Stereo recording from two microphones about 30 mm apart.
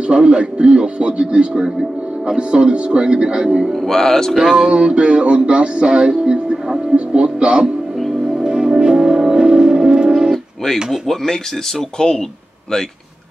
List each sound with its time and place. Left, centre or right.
0.0 s music: right
3.7 s a sound: centre
4.6 s music: right
7.2 s speech: right
8.4 s music: centre
10.1 s music: centre
12.0 s speech: left